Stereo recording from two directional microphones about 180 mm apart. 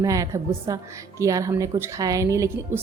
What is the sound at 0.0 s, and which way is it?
A woman's voice, 15° right (ahead or behind).